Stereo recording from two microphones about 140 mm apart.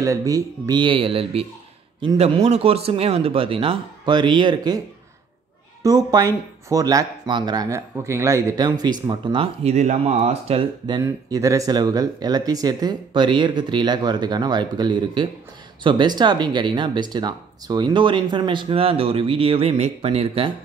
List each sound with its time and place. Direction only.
0.0 s speech: 25° right (ahead or behind); by 10.7 s 45° right (ahead or behind)
10.9 s speech: 25° right (ahead or behind); by 20.5 s 45° right (ahead or behind)